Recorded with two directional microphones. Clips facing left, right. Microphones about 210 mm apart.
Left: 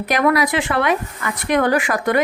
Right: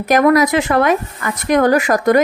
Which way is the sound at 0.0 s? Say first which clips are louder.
Right 5 dB; 45° right (ahead or behind).